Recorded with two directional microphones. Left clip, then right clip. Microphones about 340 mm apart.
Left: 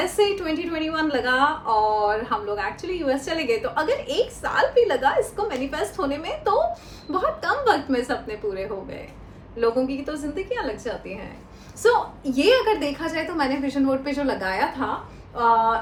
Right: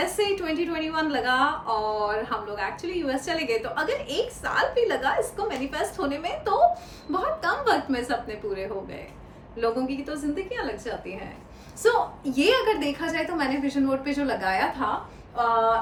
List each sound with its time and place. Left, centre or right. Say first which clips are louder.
0.0 s a woman's voice: left 4 dB; centre